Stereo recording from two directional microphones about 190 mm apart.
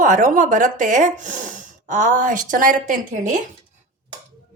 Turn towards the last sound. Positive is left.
turn(degrees=-45)  # may be behind; listen again after turning